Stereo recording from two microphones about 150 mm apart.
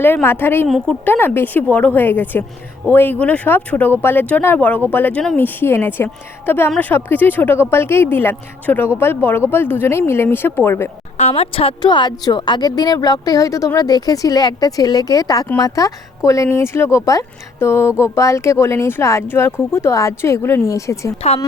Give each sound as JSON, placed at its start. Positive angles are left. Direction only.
{"t": 0.0, "sound": "speech", "side_deg": 15}
{"t": 11.2, "sound": "a woman's voice", "side_deg": 40}
{"t": 21.2, "sound": "speech", "side_deg": 45}